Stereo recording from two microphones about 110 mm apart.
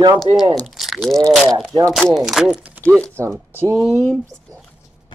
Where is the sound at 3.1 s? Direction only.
25° right (ahead or behind).